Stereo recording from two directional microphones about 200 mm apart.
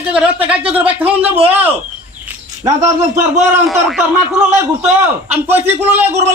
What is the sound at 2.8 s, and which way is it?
Speech, 35° right (ahead or behind).